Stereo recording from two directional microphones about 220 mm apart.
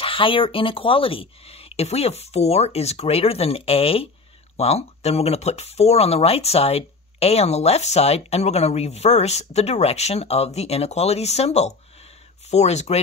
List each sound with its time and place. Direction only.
0.0 s speech: 25° left (ahead or behind)